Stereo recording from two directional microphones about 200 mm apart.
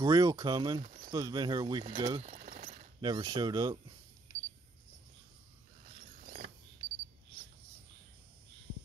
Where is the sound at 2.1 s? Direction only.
35° right (ahead or behind).